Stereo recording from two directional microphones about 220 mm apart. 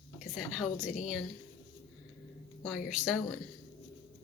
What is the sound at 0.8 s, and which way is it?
Speech, 35° left (ahead or behind).